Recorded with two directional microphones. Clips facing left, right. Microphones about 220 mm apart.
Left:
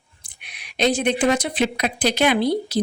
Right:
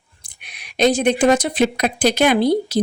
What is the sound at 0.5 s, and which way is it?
Speech, 45° right (ahead or behind).